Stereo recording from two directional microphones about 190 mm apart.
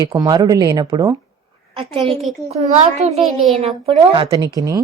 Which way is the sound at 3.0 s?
35° right (ahead or behind).